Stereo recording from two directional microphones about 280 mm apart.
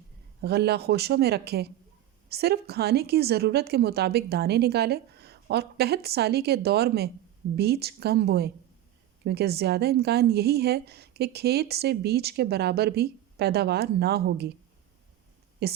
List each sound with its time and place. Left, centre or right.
0.4 s a woman's voice: right
15.6 s a woman's voice: right